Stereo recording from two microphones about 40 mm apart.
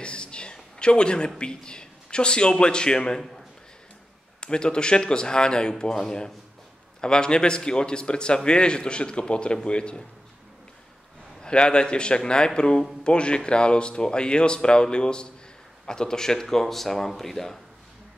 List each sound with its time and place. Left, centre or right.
0.0 s a sound: left
1.4 s a man's voice: left
4.4 s a man's voice: left
11.4 s a man's voice: left; by 17.6 s centre